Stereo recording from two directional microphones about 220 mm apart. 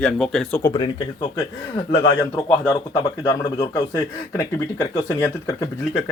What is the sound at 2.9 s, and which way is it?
Speech, 15° left (ahead or behind).